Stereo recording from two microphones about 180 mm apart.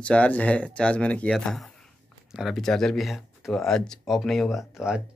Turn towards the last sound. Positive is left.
turn(degrees=0)  # may be behind; listen again after turning